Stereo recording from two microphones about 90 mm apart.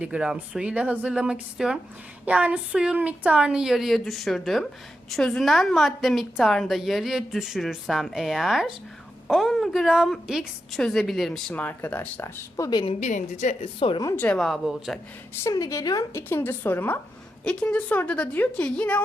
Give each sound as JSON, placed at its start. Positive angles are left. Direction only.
{"t": 0.0, "sound": "a woman's voice", "side_deg": -10}
{"t": 11.5, "sound": "a woman's voice", "side_deg": 20}
{"t": 12.2, "sound": "speech", "side_deg": 35}
{"t": 12.7, "sound": "a woman's voice", "side_deg": 75}
{"t": 14.3, "sound": "a woman's voice", "side_deg": 0}
{"t": 15.4, "sound": "speech", "side_deg": 35}
{"t": 16.1, "sound": "a woman's voice", "side_deg": 25}
{"t": 17.4, "sound": "a woman's voice", "side_deg": 10}